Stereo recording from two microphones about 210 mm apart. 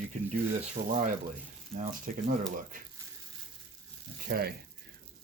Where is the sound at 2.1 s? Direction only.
40° right (ahead or behind).